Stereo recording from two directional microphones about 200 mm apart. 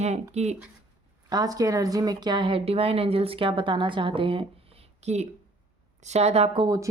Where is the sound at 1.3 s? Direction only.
20° right (ahead or behind).